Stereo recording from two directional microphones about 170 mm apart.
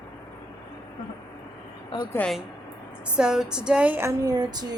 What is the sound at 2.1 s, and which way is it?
Speech, 10° left (ahead or behind).